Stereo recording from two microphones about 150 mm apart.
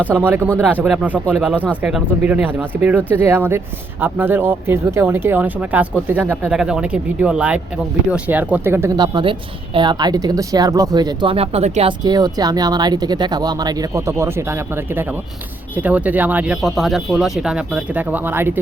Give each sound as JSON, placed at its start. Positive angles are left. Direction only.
{"t": 0.2, "sound": "speech", "side_deg": -10}
{"t": 11.9, "sound": "speech", "side_deg": -30}